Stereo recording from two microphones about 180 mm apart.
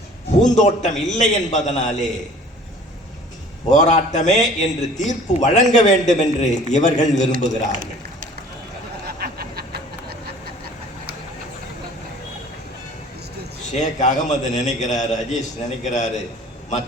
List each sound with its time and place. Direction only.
0.5 s a man's voice: 40° left (ahead or behind)
3.7 s a man's voice: 40° left (ahead or behind)
9.1 s a sound: 60° right (ahead or behind)
13.7 s a man's voice: 40° left (ahead or behind)